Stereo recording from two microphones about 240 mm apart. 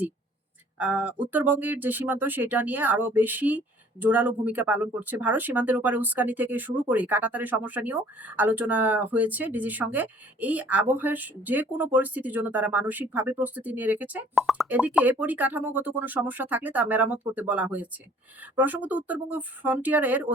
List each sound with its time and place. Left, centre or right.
0.8 s speech: centre